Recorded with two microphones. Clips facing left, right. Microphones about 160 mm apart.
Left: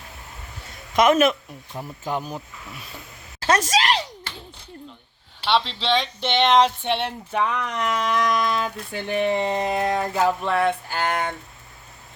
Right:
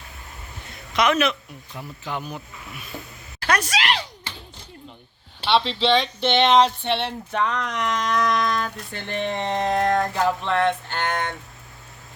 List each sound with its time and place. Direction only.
0.9 s a man's voice: 45° left (ahead or behind)
5.5 s speech: 5° right (ahead or behind)
6.6 s speech: 10° left (ahead or behind)